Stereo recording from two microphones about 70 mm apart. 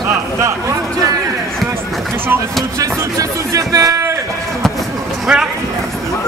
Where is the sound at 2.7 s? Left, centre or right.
Right.